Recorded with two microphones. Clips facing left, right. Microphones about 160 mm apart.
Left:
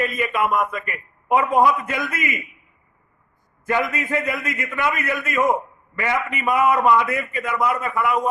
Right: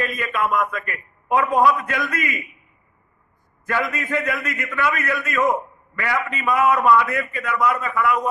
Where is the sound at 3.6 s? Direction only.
20° left (ahead or behind).